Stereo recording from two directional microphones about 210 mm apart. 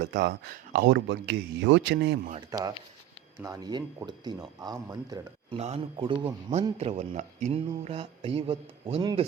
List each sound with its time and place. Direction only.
0.0 s speech: 50° right (ahead or behind)
2.5 s speech: 20° right (ahead or behind)
5.5 s speech: 30° right (ahead or behind)